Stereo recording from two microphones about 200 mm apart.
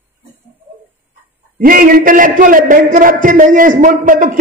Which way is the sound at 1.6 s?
45° right (ahead or behind).